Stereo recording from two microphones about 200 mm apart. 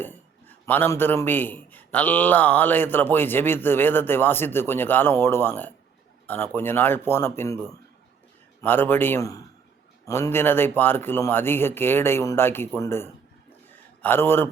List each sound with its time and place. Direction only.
0.0 s a man's voice: 10° left (ahead or behind)